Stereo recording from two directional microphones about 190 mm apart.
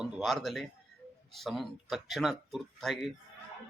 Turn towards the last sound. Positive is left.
turn(degrees=0)  # may be behind; listen again after turning